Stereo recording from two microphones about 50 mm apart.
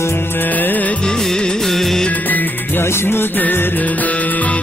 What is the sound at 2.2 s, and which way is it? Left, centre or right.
Music, left.